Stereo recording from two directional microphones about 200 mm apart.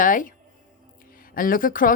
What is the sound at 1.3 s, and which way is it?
Speech, 45° left (ahead or behind).